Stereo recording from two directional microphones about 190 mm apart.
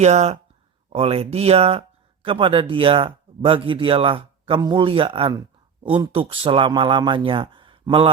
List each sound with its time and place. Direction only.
0.0 s speech: 35° right (ahead or behind)